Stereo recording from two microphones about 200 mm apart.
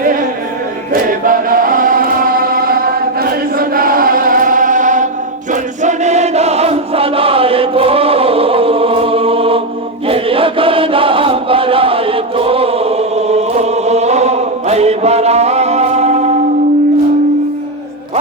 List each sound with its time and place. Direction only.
0.0 s music: 45° right (ahead or behind)
1.2 s chant: 45° right (ahead or behind)